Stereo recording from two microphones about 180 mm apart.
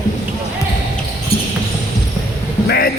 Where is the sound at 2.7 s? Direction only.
60° left (ahead or behind).